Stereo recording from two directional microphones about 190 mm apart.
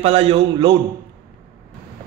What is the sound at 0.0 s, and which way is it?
Speech, 30° right (ahead or behind).